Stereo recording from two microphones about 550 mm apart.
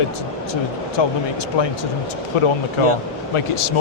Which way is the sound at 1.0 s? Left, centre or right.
Left.